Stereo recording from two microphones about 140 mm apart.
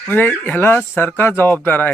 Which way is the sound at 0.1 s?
10° left (ahead or behind).